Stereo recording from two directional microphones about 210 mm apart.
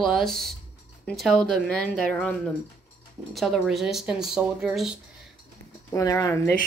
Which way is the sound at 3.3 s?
Centre (ahead or behind).